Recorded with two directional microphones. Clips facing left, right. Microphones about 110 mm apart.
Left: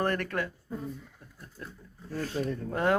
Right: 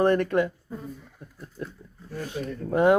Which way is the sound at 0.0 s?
20° right (ahead or behind).